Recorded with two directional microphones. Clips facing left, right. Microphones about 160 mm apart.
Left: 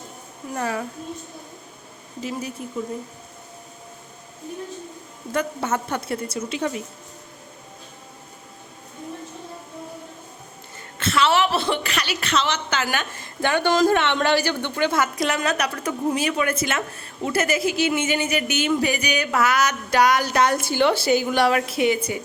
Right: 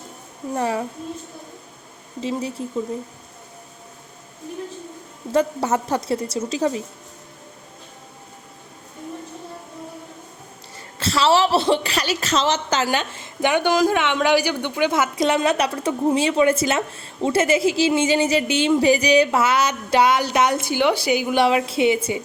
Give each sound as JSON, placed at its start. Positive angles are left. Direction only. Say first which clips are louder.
{"t": 0.5, "sound": "speech", "louder": "right 3 dB", "side_deg": -30}
{"t": 2.2, "sound": "speech", "louder": "right 4 dB", "side_deg": -30}
{"t": 5.3, "sound": "a woman's voice", "louder": "right 5 dB", "side_deg": -30}
{"t": 11.0, "sound": "a woman's voice", "louder": "right 2 dB", "side_deg": -30}
{"t": 12.9, "sound": "a woman's voice", "louder": "right 4 dB", "side_deg": -20}